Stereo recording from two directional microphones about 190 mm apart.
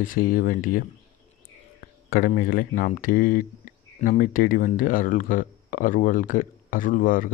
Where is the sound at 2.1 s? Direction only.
50° left (ahead or behind).